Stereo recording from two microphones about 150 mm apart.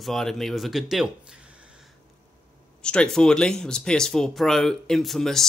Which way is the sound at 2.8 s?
5° left (ahead or behind).